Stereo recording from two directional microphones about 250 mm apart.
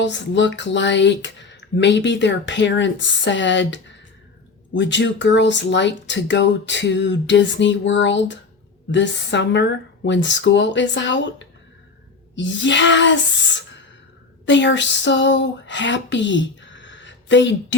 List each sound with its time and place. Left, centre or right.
0.0 s speech: left